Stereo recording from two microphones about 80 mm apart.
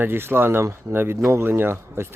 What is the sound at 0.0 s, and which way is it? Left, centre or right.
Speech, right.